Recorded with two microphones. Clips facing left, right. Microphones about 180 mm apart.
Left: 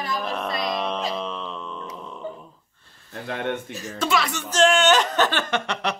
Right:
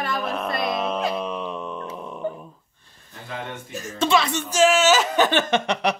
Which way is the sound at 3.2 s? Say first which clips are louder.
Left 6 dB; 60° left (ahead or behind).